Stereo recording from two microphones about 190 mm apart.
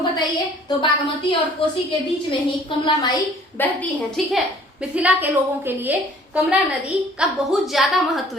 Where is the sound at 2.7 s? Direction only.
25° left (ahead or behind).